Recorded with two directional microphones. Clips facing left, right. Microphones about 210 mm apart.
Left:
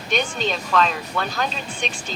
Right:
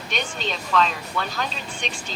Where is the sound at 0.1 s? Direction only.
45° left (ahead or behind).